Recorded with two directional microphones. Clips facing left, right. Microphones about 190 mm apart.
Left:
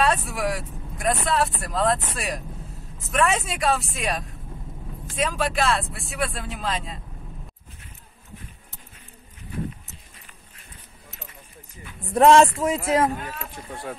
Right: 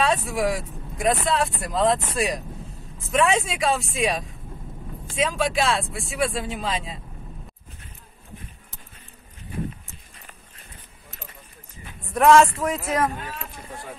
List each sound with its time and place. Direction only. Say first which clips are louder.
0.0 s speech: right 1 dB; centre (ahead or behind)
12.1 s a man's voice: left 1 dB; 30° left (ahead or behind)